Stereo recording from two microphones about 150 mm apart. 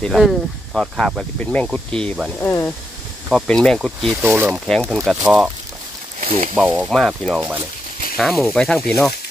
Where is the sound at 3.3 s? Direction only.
5° left (ahead or behind).